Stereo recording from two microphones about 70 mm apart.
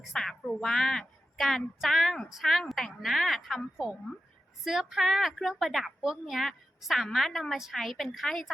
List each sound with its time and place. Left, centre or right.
0.1 s a woman's voice: centre